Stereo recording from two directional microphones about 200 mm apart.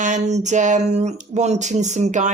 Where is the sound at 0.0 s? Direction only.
35° right (ahead or behind).